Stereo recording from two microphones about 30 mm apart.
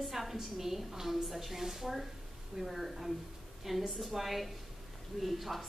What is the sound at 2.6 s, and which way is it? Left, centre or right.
A woman's voice, centre.